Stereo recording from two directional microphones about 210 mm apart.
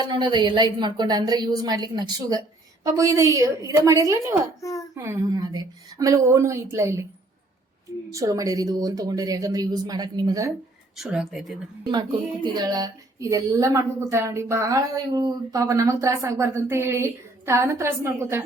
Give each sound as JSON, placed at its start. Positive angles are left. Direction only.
{"t": 0.0, "sound": "a woman's voice", "side_deg": -20}
{"t": 4.6, "sound": "a sound", "side_deg": 15}
{"t": 4.9, "sound": "speech", "side_deg": -15}
{"t": 8.1, "sound": "speech", "side_deg": -15}
{"t": 10.9, "sound": "speech", "side_deg": -5}
{"t": 11.9, "sound": "speech", "side_deg": -20}